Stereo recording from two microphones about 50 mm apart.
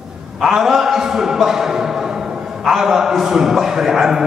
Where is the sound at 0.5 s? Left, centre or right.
Centre.